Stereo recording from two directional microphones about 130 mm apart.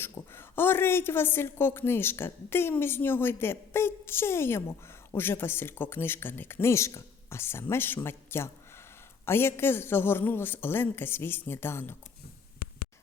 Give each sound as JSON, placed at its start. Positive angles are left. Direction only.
{"t": 0.0, "sound": "a woman's voice", "side_deg": 15}